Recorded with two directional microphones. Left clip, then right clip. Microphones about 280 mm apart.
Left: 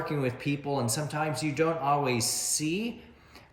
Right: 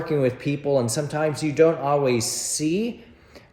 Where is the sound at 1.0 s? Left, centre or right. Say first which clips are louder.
Right 7 dB; centre.